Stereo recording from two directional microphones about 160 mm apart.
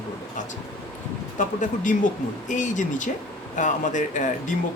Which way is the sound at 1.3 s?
50° left (ahead or behind).